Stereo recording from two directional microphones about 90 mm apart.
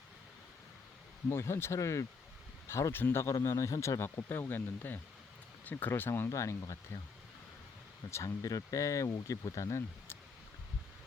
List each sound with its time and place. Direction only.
1.3 s speech: 30° left (ahead or behind)
8.1 s speech: 35° left (ahead or behind)